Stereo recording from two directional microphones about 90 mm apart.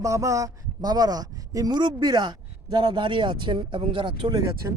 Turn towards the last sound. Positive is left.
turn(degrees=-45)  # may be behind; listen again after turning